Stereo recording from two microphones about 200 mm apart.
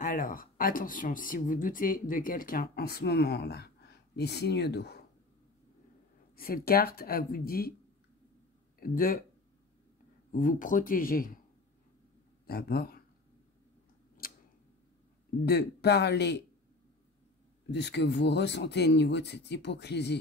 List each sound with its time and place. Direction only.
0.0 s speech: 45° left (ahead or behind)
6.3 s speech: 45° left (ahead or behind)
8.7 s speech: 45° left (ahead or behind)
10.3 s speech: 40° left (ahead or behind)
12.4 s speech: 50° left (ahead or behind)
14.2 s tick-tock: 45° left (ahead or behind)
15.4 s speech: 55° left (ahead or behind)
17.6 s speech: 60° left (ahead or behind)